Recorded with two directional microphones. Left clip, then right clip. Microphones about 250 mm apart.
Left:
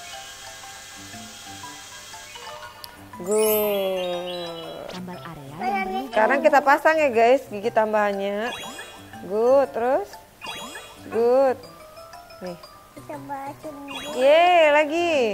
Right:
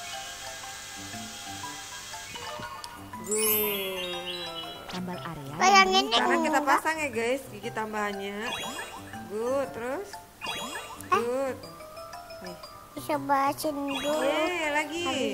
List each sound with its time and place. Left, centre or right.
3.3 s music: centre
5.6 s a child's voice: right
6.1 s a woman's voice: left
8.5 s music: centre
9.4 s a woman's voice: left
10.4 s music: centre
11.2 s a woman's voice: left
13.1 s a child's voice: right
13.8 s jingle: centre
14.2 s speech: left